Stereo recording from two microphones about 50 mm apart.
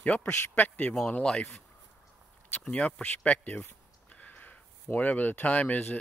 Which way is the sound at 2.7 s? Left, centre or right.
Left.